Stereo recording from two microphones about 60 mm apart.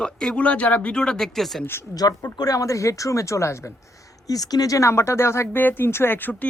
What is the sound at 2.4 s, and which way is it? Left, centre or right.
Speech, left.